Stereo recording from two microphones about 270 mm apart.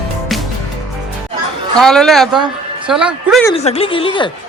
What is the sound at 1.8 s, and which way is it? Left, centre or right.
Speech, centre.